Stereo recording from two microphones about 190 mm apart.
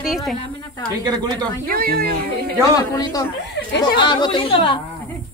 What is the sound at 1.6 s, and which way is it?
Speech, 50° right (ahead or behind).